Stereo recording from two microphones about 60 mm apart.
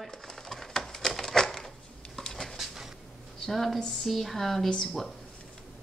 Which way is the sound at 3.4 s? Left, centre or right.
Centre.